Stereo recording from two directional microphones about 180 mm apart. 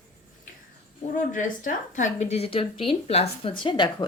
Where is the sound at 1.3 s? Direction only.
45° left (ahead or behind).